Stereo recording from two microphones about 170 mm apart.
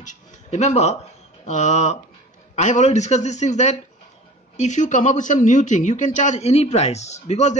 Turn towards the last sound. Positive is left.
turn(degrees=40)  # may be behind; listen again after turning